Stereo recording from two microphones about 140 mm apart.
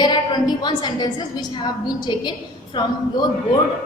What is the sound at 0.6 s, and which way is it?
A woman's voice, 30° left (ahead or behind).